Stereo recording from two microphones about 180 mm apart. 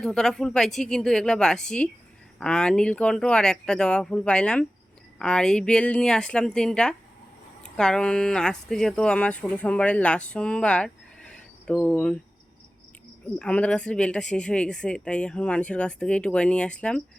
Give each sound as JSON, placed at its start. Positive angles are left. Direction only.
{"t": 0.0, "sound": "speech", "side_deg": 5}
{"t": 13.4, "sound": "speech", "side_deg": 5}